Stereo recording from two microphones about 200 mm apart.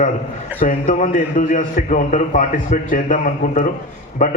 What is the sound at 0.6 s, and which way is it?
A man's voice, 40° left (ahead or behind).